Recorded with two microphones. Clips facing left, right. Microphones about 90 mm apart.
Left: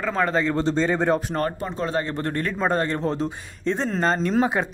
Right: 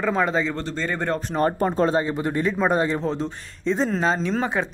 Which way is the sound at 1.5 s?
40° right (ahead or behind).